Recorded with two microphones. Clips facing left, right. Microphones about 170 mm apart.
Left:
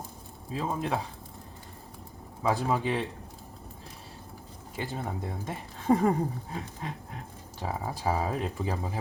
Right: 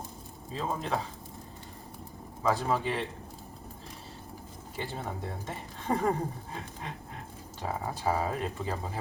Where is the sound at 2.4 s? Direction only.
10° left (ahead or behind).